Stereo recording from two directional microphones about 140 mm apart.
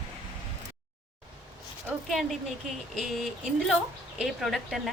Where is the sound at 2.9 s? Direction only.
Centre (ahead or behind).